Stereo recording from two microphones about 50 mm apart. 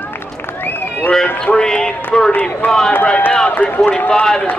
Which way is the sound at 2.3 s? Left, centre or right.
Left.